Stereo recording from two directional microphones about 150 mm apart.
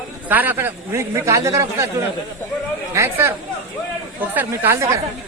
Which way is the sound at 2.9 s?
15° right (ahead or behind).